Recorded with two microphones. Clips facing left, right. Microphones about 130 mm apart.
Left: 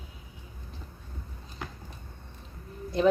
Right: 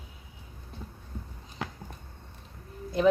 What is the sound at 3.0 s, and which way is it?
Speech, 5° right (ahead or behind).